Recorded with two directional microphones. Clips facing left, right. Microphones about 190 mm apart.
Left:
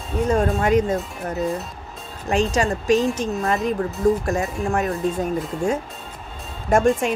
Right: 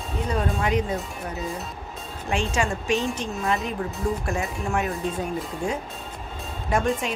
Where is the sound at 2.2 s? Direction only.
40° left (ahead or behind).